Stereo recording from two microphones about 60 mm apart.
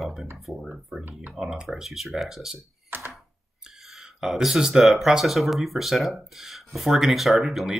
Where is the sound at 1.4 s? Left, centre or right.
Centre.